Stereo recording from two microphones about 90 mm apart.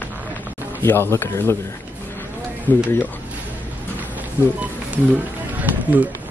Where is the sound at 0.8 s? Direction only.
25° left (ahead or behind).